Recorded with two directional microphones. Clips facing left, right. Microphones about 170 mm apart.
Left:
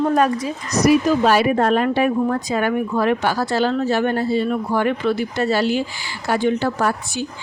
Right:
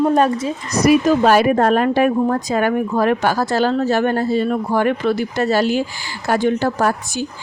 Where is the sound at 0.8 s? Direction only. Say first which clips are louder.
Right 2 dB; 50° right (ahead or behind).